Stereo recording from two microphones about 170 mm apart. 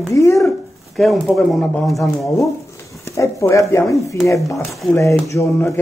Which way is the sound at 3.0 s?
15° left (ahead or behind).